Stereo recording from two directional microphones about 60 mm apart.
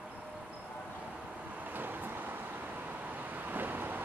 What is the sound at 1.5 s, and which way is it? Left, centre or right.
Vehicle, right.